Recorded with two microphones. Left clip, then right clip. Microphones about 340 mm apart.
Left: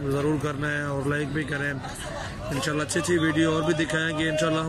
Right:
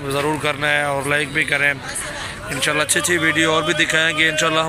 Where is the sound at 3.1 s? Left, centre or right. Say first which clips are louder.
Right 6 dB; right.